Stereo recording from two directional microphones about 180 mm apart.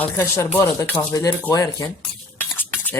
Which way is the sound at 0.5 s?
15° left (ahead or behind).